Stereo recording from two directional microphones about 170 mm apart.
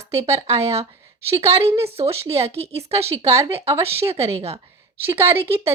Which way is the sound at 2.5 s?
35° right (ahead or behind).